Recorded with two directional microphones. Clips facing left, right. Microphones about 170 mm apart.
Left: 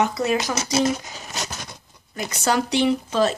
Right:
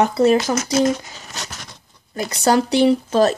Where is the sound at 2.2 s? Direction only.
35° right (ahead or behind).